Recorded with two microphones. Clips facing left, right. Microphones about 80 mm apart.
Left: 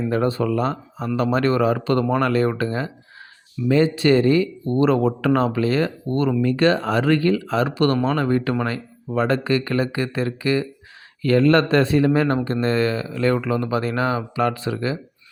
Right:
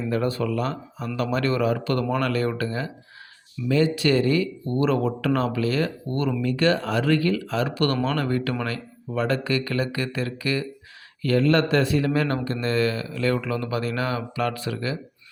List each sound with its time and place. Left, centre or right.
0.0 s speech: left
11.2 s speech: left